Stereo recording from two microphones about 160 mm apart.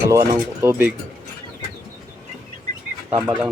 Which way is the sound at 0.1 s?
15° right (ahead or behind).